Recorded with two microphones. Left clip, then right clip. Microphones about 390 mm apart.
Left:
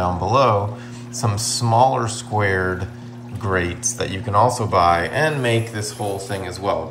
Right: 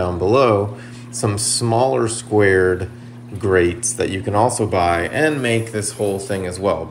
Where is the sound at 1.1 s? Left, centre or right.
Centre.